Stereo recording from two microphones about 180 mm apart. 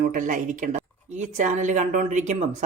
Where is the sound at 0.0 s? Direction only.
45° right (ahead or behind).